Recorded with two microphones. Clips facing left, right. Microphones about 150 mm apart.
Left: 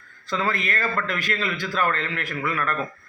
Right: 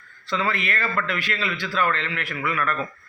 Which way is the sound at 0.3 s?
40° left (ahead or behind).